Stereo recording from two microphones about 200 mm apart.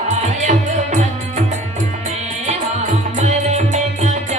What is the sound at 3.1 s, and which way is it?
Music, 35° right (ahead or behind).